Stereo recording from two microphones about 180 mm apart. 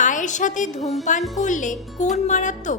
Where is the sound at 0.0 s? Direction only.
45° left (ahead or behind).